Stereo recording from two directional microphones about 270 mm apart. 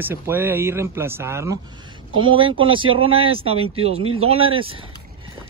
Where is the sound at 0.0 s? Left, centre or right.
Centre.